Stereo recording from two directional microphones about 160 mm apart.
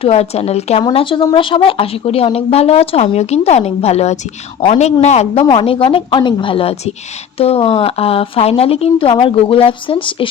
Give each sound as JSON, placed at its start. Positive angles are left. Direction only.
{"t": 0.0, "sound": "speech", "side_deg": 40}